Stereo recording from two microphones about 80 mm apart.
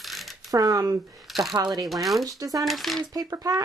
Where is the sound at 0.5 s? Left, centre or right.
Right.